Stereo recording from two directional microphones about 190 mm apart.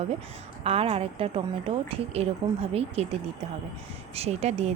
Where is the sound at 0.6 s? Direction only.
30° right (ahead or behind).